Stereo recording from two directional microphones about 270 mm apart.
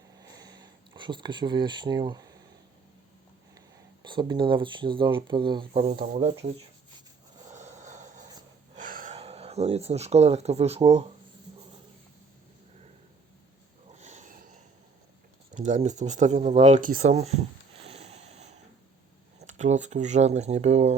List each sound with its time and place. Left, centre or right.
0.2 s a sound: centre
4.0 s speech: centre
7.4 s vehicle: right
8.7 s speech: right
13.9 s sniff: right
15.5 s speech: right